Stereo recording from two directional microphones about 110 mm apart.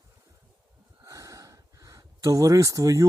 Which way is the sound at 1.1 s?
30° right (ahead or behind).